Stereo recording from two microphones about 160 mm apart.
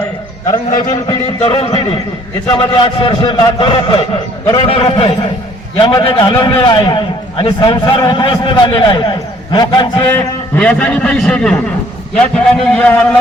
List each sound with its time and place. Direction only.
1.4 s a man's voice: 40° left (ahead or behind)
10.1 s a man's voice: 10° left (ahead or behind)